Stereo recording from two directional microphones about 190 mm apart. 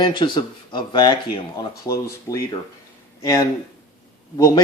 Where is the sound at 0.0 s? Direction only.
25° left (ahead or behind).